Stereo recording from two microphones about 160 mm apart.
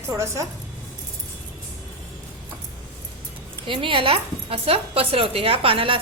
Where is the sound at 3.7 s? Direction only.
30° right (ahead or behind).